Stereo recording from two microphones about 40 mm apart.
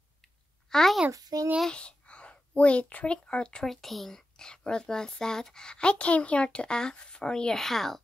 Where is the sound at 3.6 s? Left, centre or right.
Centre.